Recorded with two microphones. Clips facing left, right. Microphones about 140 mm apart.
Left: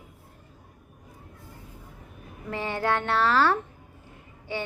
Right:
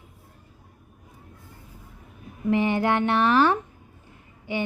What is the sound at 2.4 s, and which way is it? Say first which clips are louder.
A woman's voice: right 6 dB; 20° right (ahead or behind).